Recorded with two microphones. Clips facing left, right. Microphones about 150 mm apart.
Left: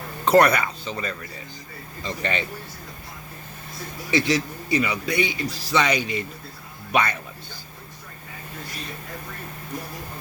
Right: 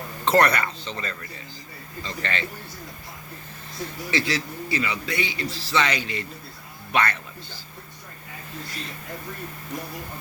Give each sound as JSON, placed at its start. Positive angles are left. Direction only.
{"t": 0.3, "sound": "a man's voice", "side_deg": 10}
{"t": 4.1, "sound": "a man's voice", "side_deg": 20}